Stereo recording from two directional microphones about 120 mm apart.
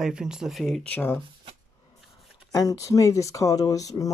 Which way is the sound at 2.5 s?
30° left (ahead or behind).